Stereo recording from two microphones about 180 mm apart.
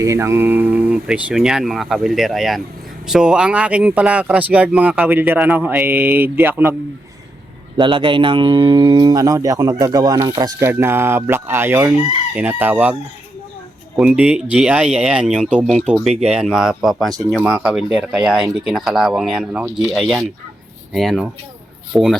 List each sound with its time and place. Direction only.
0.0 s speech: 15° right (ahead or behind)
7.8 s speech: 30° right (ahead or behind); by 17.1 s centre (ahead or behind)
17.1 s speech: 20° right (ahead or behind)
17.4 s speech: 5° right (ahead or behind)